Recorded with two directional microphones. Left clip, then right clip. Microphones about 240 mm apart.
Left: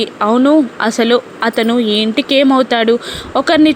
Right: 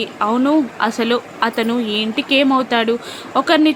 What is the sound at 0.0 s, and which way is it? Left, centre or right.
Speech, centre.